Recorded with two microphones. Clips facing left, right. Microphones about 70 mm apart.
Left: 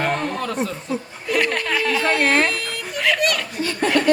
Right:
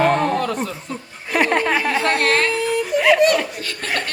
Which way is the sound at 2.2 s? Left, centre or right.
Centre.